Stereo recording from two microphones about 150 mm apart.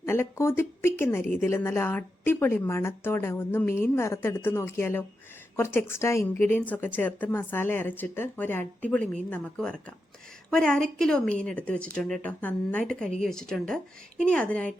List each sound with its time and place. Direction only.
0.0 s a woman's voice: 15° left (ahead or behind)